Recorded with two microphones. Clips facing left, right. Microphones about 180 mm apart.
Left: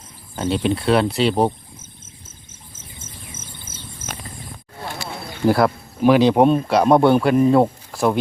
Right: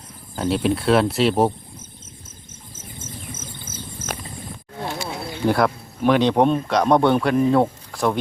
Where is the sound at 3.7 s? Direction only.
30° left (ahead or behind).